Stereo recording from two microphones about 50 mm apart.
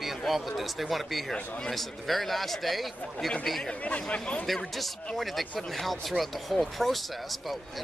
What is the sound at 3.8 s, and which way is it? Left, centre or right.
Speech, left.